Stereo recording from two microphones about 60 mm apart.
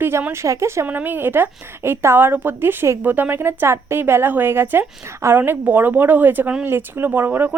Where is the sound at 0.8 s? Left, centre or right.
Right.